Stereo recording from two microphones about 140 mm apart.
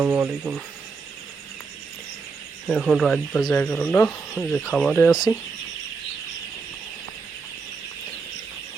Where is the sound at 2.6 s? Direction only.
5° right (ahead or behind).